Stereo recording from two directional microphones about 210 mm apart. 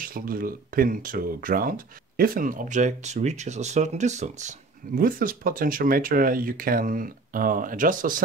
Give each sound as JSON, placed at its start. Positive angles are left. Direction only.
{"t": 0.0, "sound": "speech", "side_deg": -45}